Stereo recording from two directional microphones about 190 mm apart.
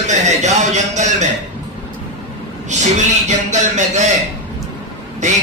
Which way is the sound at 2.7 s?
40° right (ahead or behind).